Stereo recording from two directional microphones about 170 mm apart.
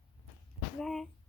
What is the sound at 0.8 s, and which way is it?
Speech, 5° left (ahead or behind).